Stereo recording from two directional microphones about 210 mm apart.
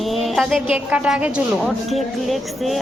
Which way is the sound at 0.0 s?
Centre (ahead or behind).